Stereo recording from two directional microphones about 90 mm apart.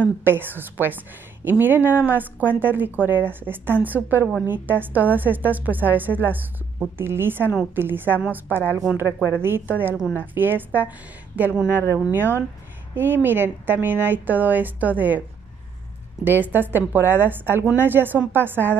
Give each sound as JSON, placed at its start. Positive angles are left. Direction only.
{"t": 0.0, "sound": "a woman's voice", "side_deg": -25}
{"t": 12.9, "sound": "a woman's voice", "side_deg": -20}
{"t": 16.3, "sound": "a woman's voice", "side_deg": -20}